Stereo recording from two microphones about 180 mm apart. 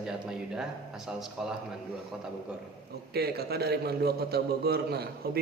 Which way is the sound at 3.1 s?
60° right (ahead or behind).